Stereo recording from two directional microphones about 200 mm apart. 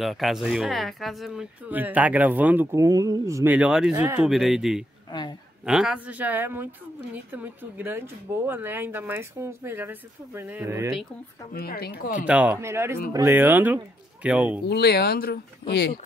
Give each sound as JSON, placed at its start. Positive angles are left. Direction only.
{"t": 0.0, "sound": "speech", "side_deg": 0}
{"t": 11.5, "sound": "speech", "side_deg": 50}
{"t": 12.3, "sound": "speech", "side_deg": -10}
{"t": 14.7, "sound": "speech", "side_deg": 55}